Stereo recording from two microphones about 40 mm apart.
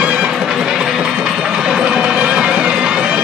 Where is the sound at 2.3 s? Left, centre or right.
Right.